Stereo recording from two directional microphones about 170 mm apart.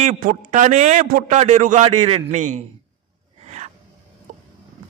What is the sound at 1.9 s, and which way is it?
Speech, 30° right (ahead or behind).